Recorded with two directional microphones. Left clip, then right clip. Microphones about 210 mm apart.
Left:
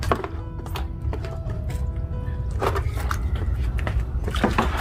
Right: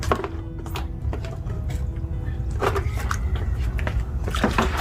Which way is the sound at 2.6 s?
10° left (ahead or behind).